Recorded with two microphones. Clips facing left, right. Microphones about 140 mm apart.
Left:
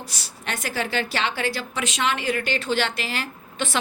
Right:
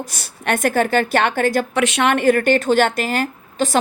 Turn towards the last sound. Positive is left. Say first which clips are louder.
# right 8 dB
turn(degrees=-40)  # may be behind; listen again after turning